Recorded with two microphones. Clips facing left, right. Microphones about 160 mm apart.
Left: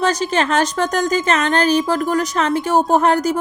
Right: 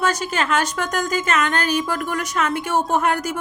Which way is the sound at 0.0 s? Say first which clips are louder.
Left 4 dB; 35° left (ahead or behind).